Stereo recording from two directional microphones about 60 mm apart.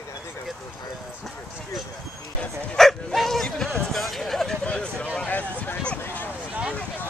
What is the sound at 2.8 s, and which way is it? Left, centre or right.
Dog, centre.